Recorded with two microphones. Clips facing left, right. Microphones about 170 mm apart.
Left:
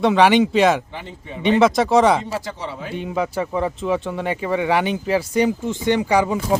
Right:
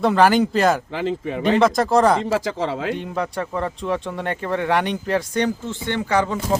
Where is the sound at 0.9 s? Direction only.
90° right.